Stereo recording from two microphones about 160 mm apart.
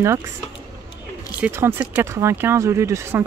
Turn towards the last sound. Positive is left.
turn(degrees=-15)  # may be behind; listen again after turning